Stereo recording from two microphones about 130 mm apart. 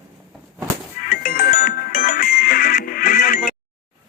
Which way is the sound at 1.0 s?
90° left.